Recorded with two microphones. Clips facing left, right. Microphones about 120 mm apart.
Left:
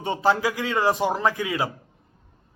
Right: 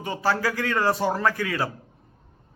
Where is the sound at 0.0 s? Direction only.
25° left (ahead or behind).